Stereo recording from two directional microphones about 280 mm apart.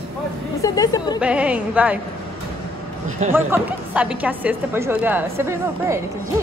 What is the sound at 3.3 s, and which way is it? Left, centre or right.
A woman's voice, centre.